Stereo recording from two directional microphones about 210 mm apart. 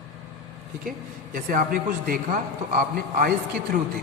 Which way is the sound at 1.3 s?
40° right (ahead or behind).